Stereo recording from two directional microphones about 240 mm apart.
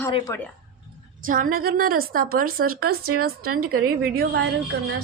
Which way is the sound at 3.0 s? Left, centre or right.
Right.